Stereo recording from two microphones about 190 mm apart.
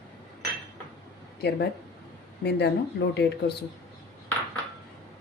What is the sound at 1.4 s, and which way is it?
Speech, 60° left (ahead or behind).